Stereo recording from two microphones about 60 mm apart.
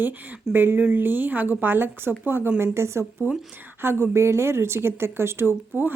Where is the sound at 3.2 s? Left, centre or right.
Right.